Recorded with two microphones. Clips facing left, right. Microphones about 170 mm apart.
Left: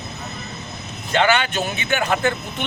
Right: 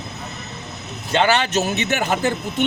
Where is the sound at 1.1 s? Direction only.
35° right (ahead or behind).